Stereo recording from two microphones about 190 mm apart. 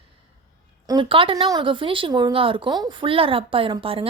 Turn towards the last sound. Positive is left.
turn(degrees=-30)  # may be behind; listen again after turning